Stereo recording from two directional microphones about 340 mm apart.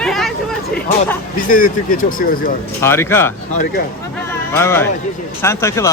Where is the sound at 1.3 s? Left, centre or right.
Left.